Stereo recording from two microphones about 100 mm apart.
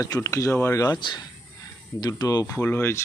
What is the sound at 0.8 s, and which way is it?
Speech, 45° left (ahead or behind).